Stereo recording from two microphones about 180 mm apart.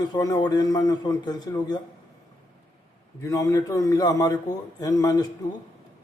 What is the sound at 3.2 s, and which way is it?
Speech, 15° left (ahead or behind).